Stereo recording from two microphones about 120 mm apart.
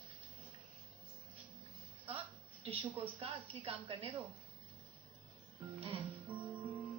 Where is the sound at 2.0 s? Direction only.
50° right (ahead or behind).